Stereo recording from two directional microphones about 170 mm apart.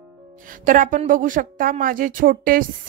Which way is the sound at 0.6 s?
50° right (ahead or behind).